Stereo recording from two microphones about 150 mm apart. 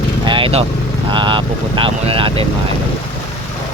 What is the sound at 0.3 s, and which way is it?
Vehicle, 35° right (ahead or behind).